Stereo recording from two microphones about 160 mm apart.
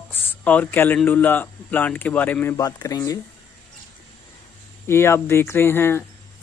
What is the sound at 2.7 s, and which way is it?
Speech, 25° left (ahead or behind).